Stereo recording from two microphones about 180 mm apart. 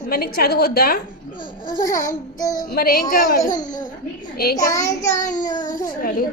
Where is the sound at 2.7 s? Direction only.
55° left (ahead or behind).